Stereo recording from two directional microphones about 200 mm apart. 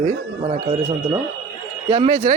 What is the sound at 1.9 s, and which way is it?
Speech, 30° right (ahead or behind).